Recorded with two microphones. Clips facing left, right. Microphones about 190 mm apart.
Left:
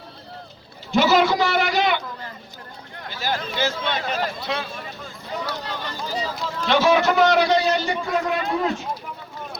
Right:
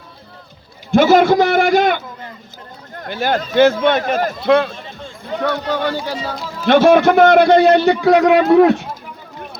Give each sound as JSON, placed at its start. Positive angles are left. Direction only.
{"t": 0.9, "sound": "a man's voice", "side_deg": -50}
{"t": 5.4, "sound": "speech", "side_deg": -70}
{"t": 6.7, "sound": "a man's voice", "side_deg": -55}